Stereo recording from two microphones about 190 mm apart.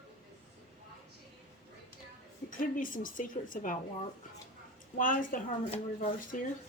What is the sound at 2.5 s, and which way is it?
Speech, 45° left (ahead or behind).